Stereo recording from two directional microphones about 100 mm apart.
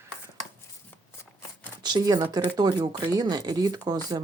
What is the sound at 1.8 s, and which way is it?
Speech, 45° right (ahead or behind).